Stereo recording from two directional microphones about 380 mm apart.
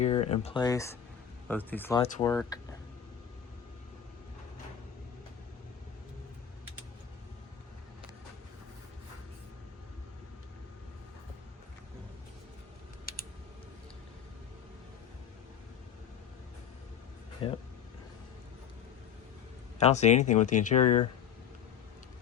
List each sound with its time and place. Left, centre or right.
0.0 s speech: centre
17.4 s vehicle: centre
19.8 s speech: centre